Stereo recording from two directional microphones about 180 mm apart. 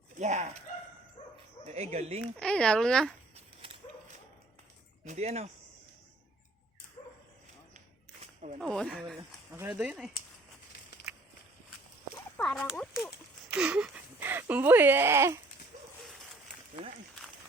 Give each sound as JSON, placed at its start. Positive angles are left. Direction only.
{"t": 0.2, "sound": "speech", "side_deg": -40}
{"t": 1.6, "sound": "speech", "side_deg": -35}
{"t": 2.2, "sound": "speech", "side_deg": 5}
{"t": 5.0, "sound": "speech", "side_deg": -40}
{"t": 8.2, "sound": "a sound", "side_deg": -40}
{"t": 8.6, "sound": "speech", "side_deg": 5}
{"t": 9.5, "sound": "speech", "side_deg": -10}
{"t": 11.1, "sound": "walk", "side_deg": -5}
{"t": 12.4, "sound": "speech", "side_deg": 5}